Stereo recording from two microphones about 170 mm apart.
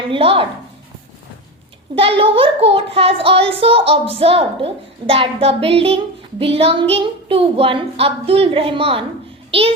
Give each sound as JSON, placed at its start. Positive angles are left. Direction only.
{"t": 0.1, "sound": "speech", "side_deg": -30}
{"t": 2.0, "sound": "a child's voice", "side_deg": -35}